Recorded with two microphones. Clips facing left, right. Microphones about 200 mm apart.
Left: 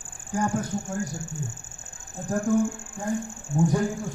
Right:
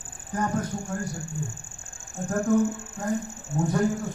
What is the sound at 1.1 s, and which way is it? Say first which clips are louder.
Speech: right 1 dB; 45° left (ahead or behind).